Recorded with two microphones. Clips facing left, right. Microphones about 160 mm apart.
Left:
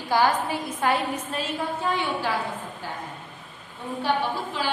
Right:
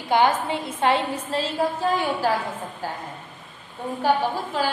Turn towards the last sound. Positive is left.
turn(degrees=-40)  # may be behind; listen again after turning